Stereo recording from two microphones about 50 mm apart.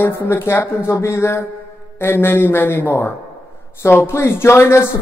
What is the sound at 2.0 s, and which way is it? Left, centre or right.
Speech, left.